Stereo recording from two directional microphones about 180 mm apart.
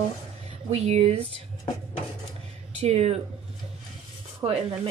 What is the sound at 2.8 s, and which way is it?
Speech, 35° right (ahead or behind).